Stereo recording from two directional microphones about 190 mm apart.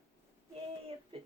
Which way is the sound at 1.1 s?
30° right (ahead or behind).